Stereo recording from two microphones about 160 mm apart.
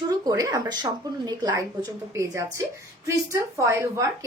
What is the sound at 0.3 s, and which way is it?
A woman's voice, 20° right (ahead or behind).